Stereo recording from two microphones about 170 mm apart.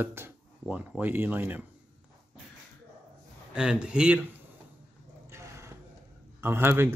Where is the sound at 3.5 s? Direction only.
5° right (ahead or behind).